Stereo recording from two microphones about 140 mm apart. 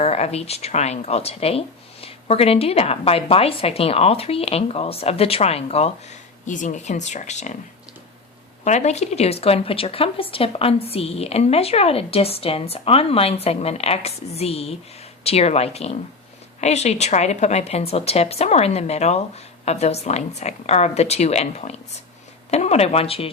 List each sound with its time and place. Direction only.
0.0 s speech: 50° left (ahead or behind)
6.4 s speech: 65° left (ahead or behind)
8.6 s speech: 55° left (ahead or behind)